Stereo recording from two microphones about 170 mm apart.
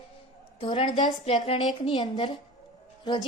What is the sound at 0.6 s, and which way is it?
A woman's voice, 35° left (ahead or behind).